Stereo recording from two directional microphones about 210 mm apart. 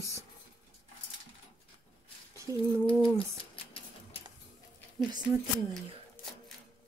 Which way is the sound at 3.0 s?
25° left (ahead or behind).